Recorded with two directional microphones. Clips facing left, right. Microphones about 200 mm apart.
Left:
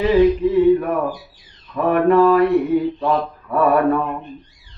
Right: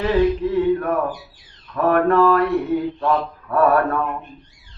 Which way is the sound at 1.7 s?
10° left (ahead or behind).